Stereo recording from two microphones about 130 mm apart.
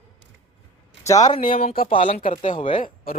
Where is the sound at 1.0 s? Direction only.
30° left (ahead or behind).